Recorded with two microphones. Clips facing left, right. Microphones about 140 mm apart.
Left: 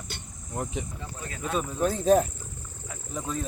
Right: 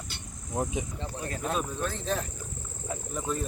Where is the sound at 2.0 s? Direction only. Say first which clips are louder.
Left 14 dB; 45° left (ahead or behind).